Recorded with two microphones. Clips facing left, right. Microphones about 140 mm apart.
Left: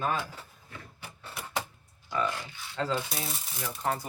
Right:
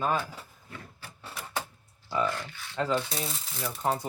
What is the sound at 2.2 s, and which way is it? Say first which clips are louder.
Speech: right 2 dB; 15° left (ahead or behind).